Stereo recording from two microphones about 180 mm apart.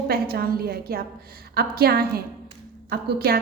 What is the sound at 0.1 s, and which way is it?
A woman's voice, 60° right (ahead or behind).